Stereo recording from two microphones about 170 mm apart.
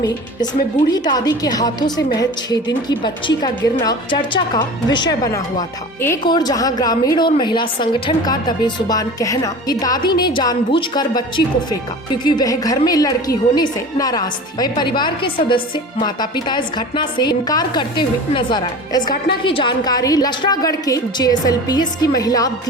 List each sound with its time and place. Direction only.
0.9 s a woman's voice: 25° left (ahead or behind)
12.2 s a woman's voice: 20° left (ahead or behind)